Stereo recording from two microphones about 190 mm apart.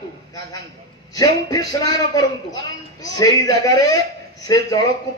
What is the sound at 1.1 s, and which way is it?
A man's voice, 15° left (ahead or behind).